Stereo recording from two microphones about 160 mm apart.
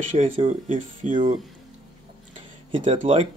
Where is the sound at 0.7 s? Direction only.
50° right (ahead or behind).